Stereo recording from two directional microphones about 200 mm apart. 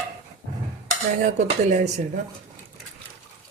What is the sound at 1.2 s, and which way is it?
Speech, 35° right (ahead or behind).